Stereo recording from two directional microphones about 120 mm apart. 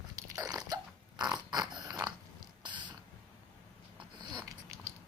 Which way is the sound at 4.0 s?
40° right (ahead or behind).